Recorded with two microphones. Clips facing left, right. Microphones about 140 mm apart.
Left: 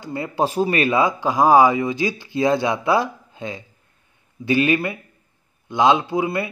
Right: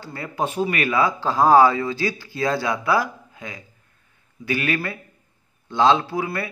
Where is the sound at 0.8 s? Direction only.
20° left (ahead or behind).